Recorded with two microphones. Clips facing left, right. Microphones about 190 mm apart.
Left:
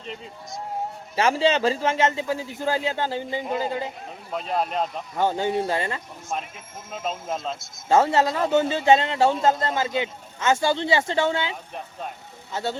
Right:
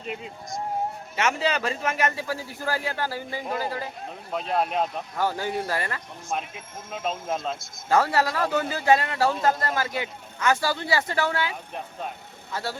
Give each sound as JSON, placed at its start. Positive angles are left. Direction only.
{"t": 1.1, "sound": "a man's voice", "side_deg": 30}
{"t": 4.3, "sound": "speech", "side_deg": 0}
{"t": 5.1, "sound": "a man's voice", "side_deg": 20}
{"t": 6.9, "sound": "speech", "side_deg": 0}
{"t": 7.9, "sound": "a man's voice", "side_deg": 25}